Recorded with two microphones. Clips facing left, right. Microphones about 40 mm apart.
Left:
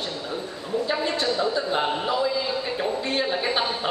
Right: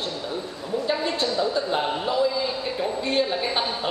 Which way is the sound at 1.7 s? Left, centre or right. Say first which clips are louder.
Left 1 dB; centre.